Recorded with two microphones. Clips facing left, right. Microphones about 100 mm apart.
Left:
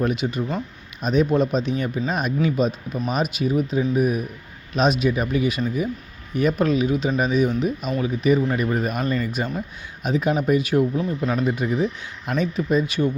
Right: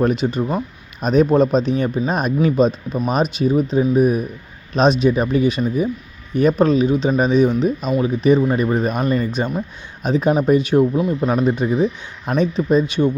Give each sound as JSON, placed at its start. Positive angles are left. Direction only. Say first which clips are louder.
{"t": 0.0, "sound": "speech", "louder": "right 5 dB", "side_deg": -35}
{"t": 11.2, "sound": "speech", "louder": "right 5 dB", "side_deg": -35}